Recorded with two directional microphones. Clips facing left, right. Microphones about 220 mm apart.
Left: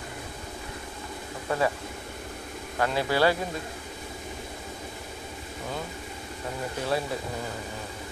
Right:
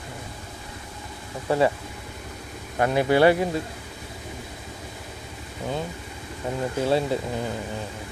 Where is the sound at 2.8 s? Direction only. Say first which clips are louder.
Right 6 dB; 20° right (ahead or behind).